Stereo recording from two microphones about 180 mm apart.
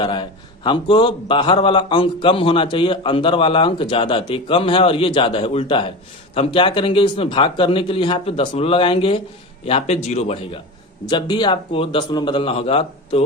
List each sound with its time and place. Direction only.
0.0 s a man's voice: 25° left (ahead or behind)
11.1 s a man's voice: 25° left (ahead or behind)